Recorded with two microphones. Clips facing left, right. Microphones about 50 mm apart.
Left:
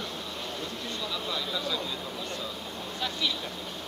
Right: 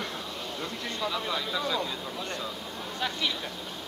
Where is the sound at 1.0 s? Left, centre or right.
Right.